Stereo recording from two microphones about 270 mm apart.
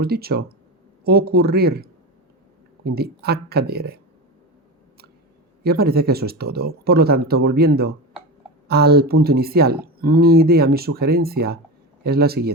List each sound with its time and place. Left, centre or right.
0.0 s speech: right
5.6 s speech: right